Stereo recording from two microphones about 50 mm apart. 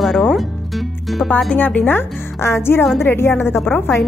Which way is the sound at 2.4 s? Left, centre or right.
Left.